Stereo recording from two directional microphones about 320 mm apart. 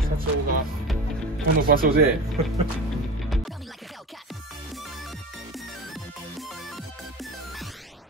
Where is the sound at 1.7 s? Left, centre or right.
Right.